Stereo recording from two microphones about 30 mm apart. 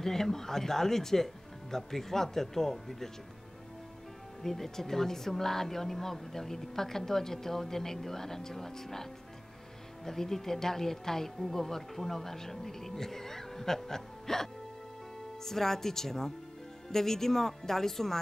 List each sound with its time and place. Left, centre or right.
0.0 s speech: centre
4.4 s speech: centre
10.0 s speech: centre